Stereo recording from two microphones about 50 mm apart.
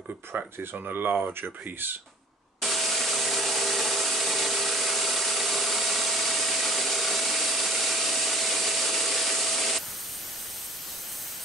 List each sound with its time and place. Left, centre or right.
0.3 s speech: right
2.6 s wood: centre